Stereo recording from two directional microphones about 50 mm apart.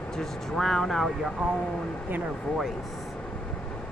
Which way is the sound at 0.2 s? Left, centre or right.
Centre.